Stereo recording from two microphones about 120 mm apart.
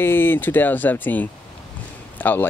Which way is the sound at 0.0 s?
15° left (ahead or behind).